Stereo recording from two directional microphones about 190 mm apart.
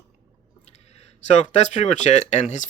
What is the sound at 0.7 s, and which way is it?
Speech, 35° left (ahead or behind).